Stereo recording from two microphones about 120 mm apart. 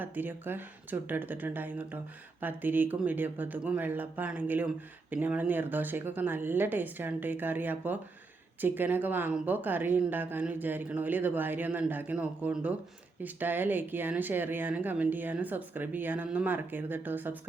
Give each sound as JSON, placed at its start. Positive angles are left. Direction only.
{"t": 0.0, "sound": "speech", "side_deg": -15}